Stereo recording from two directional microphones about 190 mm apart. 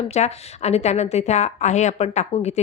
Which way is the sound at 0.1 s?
35° left (ahead or behind).